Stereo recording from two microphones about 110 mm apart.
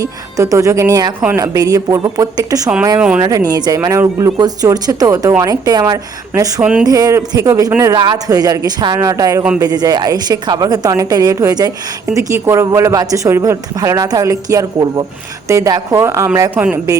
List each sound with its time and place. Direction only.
0.0 s a woman's voice: 30° right (ahead or behind)
6.6 s speech: 10° right (ahead or behind)
6.8 s a woman's voice: 30° right (ahead or behind)
7.9 s a woman's voice: 40° right (ahead or behind)